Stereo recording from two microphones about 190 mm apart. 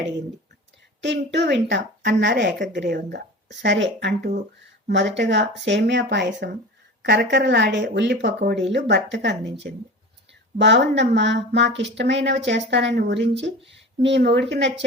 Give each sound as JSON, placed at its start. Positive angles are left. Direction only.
{"t": 1.0, "sound": "speech", "side_deg": -65}